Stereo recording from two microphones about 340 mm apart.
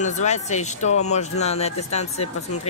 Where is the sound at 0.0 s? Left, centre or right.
Centre.